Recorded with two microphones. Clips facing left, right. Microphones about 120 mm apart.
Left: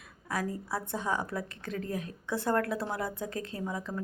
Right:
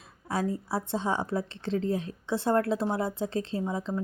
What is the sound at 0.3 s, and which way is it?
A woman's voice, 25° right (ahead or behind).